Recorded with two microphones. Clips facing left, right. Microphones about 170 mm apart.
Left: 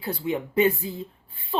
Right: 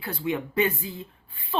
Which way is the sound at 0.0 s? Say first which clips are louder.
Left 1 dB; 30° left (ahead or behind).